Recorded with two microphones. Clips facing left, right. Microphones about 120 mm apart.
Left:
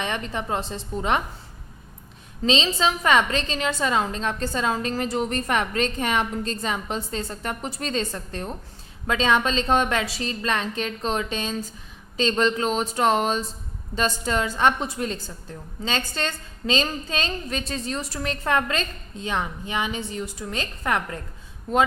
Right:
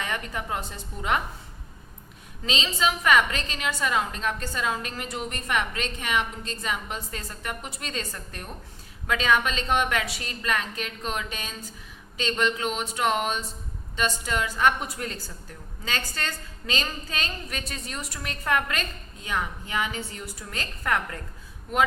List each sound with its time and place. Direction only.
0.0 s a woman's voice: 25° left (ahead or behind)
2.4 s a woman's voice: 30° left (ahead or behind)